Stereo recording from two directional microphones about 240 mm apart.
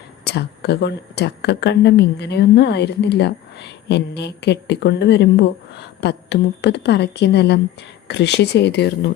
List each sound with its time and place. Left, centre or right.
0.3 s a woman's voice: left